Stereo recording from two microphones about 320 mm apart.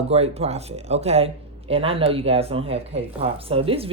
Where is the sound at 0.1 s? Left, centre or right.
Centre.